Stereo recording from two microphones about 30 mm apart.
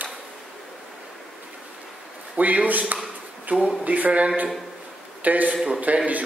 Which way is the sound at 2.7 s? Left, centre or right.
Right.